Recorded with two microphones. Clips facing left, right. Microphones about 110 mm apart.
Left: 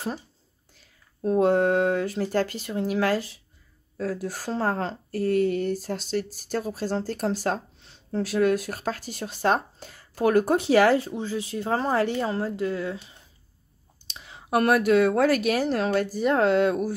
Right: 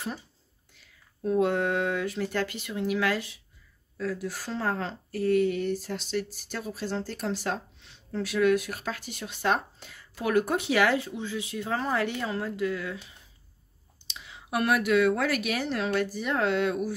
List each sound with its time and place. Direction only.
0.7 s a woman's voice: 35° left (ahead or behind)
14.0 s a woman's voice: 40° left (ahead or behind)